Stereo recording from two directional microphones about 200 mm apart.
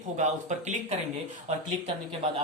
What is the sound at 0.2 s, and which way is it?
Speech, 35° right (ahead or behind).